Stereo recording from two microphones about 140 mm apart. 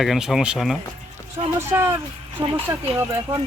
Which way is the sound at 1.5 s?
20° right (ahead or behind).